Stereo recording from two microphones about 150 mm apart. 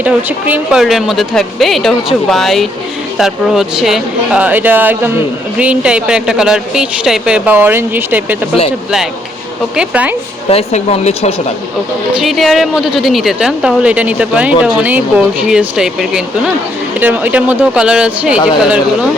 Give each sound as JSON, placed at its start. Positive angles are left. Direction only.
{"t": 0.0, "sound": "a woman's voice", "side_deg": -10}
{"t": 9.7, "sound": "speech", "side_deg": -10}
{"t": 10.5, "sound": "speech", "side_deg": 45}
{"t": 12.2, "sound": "a woman's voice", "side_deg": 0}